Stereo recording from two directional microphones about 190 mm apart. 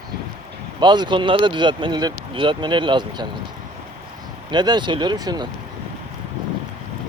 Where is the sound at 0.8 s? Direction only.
25° right (ahead or behind).